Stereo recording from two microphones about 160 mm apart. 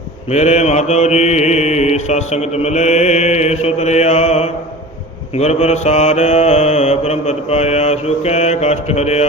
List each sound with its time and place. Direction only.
0.3 s mantra: 45° left (ahead or behind)